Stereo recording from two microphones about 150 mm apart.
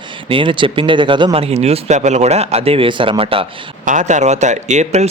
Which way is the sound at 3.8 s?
55° right (ahead or behind).